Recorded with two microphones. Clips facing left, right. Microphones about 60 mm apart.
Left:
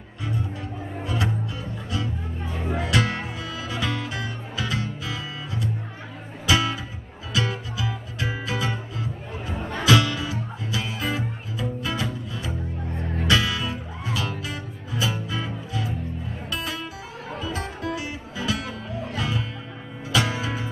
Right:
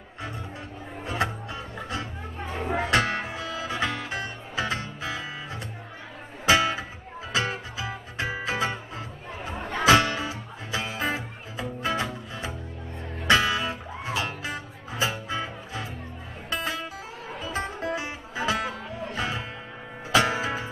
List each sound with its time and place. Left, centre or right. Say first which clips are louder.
1.0 s music: even; right